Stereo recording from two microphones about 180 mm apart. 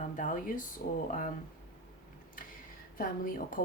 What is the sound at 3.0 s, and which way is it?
Speech, 50° left (ahead or behind).